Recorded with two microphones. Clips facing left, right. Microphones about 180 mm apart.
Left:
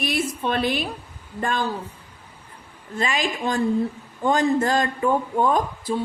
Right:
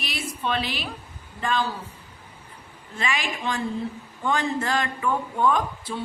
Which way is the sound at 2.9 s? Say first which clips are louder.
Left 4 dB; 40° left (ahead or behind).